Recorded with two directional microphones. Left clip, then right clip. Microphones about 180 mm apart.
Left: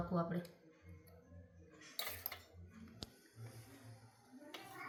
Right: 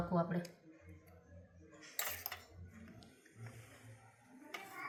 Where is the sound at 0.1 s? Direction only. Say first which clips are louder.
Right 4 dB; 5° right (ahead or behind).